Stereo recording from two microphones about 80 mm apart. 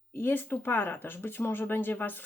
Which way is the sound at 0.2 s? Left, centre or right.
Left.